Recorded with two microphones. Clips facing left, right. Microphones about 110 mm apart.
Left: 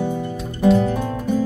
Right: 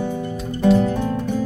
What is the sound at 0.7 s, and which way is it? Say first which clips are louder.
Music: even; 15° left (ahead or behind).